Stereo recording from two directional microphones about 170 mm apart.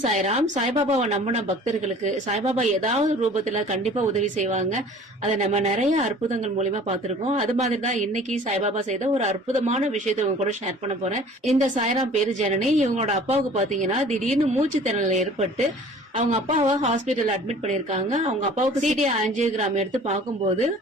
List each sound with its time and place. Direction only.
0.0 s a woman's voice: 40° right (ahead or behind)
11.5 s a woman's voice: 45° right (ahead or behind)